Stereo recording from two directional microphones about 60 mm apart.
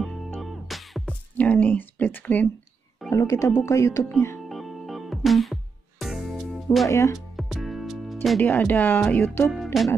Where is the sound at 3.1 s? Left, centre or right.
Left.